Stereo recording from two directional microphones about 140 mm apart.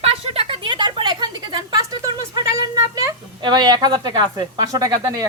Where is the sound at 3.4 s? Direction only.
30° right (ahead or behind).